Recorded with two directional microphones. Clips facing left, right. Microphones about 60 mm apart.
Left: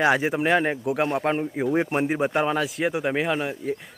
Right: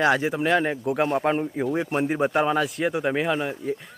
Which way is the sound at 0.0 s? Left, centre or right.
Centre.